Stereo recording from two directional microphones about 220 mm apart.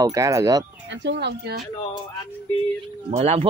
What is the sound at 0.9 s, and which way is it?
Speech, 50° right (ahead or behind).